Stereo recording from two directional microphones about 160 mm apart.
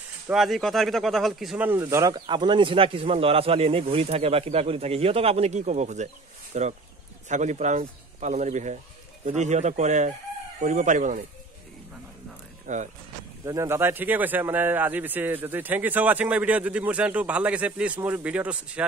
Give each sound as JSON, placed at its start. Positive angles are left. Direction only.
{"t": 0.3, "sound": "speech", "side_deg": 0}
{"t": 12.6, "sound": "speech", "side_deg": -50}
{"t": 13.5, "sound": "speech", "side_deg": -15}